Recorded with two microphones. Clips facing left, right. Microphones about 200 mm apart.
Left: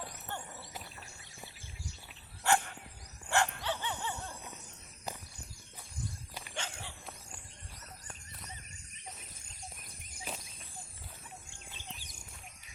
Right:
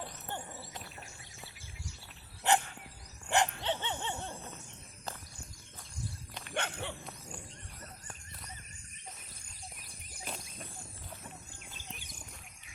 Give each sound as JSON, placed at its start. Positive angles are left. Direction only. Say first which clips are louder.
{"t": 2.5, "sound": "dog", "louder": "right 1 dB", "side_deg": -20}
{"t": 6.5, "sound": "dog", "louder": "right 7 dB", "side_deg": -60}